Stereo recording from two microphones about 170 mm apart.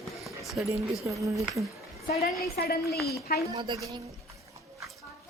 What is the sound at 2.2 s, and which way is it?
A woman's voice, 65° left (ahead or behind).